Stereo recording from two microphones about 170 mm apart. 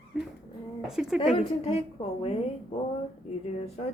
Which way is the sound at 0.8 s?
5° right (ahead or behind).